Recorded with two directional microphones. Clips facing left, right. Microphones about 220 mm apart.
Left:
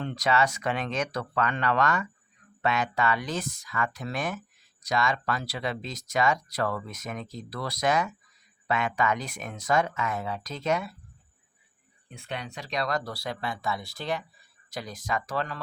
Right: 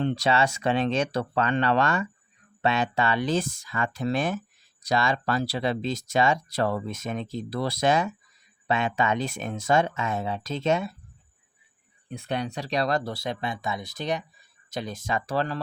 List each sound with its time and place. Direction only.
0.0 s speech: 30° right (ahead or behind)
12.1 s speech: 40° right (ahead or behind)